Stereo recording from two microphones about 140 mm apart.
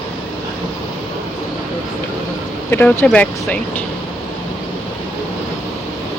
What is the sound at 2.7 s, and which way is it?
Speech, 15° left (ahead or behind).